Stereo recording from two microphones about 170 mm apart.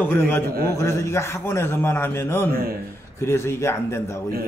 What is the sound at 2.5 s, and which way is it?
Speech, 60° right (ahead or behind).